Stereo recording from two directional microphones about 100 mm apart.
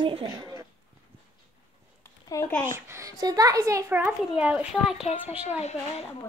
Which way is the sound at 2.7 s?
25° right (ahead or behind).